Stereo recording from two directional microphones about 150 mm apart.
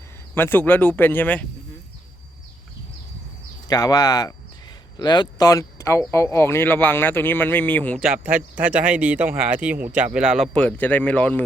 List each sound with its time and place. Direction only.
0.3 s speech: 15° left (ahead or behind)
3.7 s speech: 25° left (ahead or behind)
7.9 s speech: 5° right (ahead or behind)
10.5 s speech: 10° left (ahead or behind)